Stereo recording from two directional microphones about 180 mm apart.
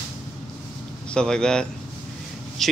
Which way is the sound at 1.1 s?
5° left (ahead or behind).